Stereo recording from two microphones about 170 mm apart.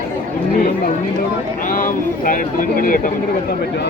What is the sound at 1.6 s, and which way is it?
Speech, 55° left (ahead or behind).